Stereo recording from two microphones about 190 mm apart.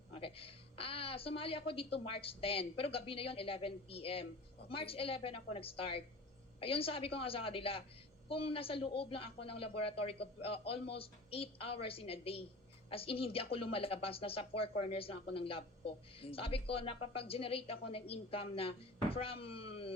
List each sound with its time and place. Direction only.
0.1 s speech: 30° left (ahead or behind)